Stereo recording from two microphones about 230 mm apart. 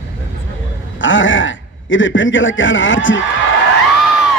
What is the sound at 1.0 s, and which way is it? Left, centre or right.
A man's voice, left.